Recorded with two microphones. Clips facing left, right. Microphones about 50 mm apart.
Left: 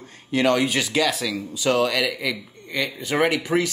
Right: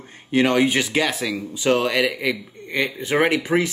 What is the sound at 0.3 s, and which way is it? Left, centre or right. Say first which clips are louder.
Speech: right 2 dB; right.